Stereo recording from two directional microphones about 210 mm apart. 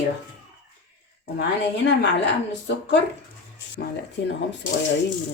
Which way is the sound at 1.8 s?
60° left (ahead or behind).